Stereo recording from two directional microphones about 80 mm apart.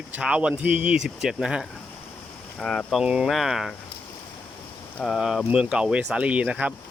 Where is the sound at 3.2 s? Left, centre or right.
Centre.